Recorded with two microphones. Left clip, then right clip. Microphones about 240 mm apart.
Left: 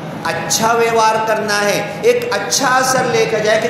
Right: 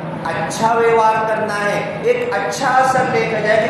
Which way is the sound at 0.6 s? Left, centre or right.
Left.